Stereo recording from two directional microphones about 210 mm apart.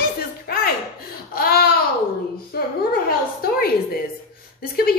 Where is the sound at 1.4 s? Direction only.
45° left (ahead or behind).